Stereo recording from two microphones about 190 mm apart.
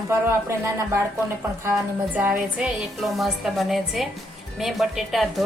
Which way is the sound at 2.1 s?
5° right (ahead or behind).